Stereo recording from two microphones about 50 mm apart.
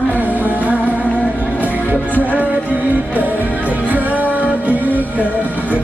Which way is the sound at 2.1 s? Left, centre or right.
Left.